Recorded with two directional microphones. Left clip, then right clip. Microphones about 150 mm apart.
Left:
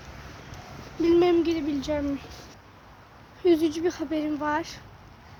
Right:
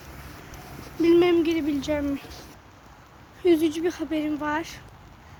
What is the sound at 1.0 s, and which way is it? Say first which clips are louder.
Speech: right 2 dB; 10° left (ahead or behind).